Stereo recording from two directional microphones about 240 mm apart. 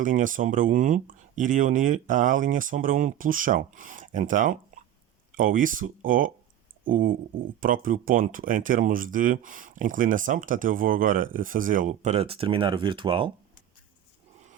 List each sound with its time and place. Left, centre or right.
0.0 s speech: right